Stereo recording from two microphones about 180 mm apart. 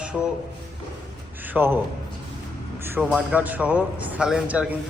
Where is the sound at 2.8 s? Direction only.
10° right (ahead or behind).